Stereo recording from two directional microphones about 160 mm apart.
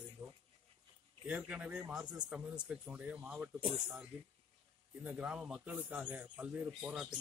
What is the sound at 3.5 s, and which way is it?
Speech, 35° right (ahead or behind).